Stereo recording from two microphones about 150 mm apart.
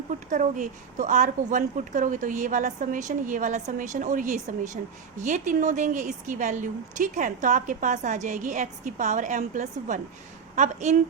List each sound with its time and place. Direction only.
0.3 s a woman's voice: 60° right (ahead or behind)